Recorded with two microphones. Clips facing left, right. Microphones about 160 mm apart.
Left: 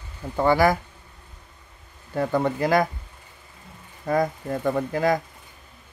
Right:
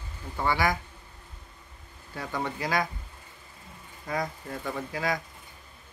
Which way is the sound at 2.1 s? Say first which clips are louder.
Left 10 dB; 45° left (ahead or behind).